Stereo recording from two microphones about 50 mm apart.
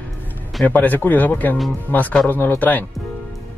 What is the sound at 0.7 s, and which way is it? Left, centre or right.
Speech, left.